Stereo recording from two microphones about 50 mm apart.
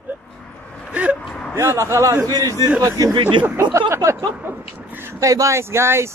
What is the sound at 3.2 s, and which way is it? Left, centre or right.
Speech, right.